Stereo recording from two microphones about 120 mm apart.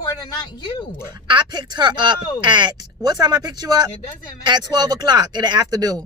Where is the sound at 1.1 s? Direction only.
40° right (ahead or behind).